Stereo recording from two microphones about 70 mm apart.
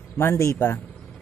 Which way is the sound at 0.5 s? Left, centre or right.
Left.